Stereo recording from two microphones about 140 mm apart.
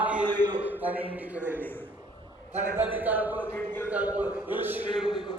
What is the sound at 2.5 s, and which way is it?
Speech, 60° right (ahead or behind).